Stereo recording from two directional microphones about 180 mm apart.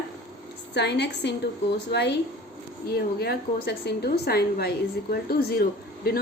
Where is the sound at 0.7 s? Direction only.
70° left (ahead or behind).